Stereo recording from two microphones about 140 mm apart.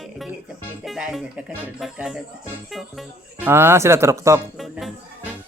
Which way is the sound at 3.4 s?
15° right (ahead or behind).